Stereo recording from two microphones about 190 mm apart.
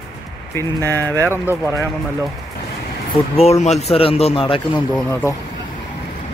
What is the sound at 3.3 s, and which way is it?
A man's voice, 35° left (ahead or behind).